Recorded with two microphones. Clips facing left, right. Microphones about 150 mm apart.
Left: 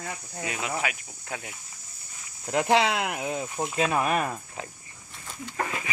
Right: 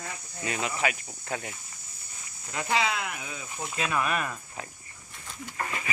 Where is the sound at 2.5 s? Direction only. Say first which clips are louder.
Left 6 dB; 70° left (ahead or behind).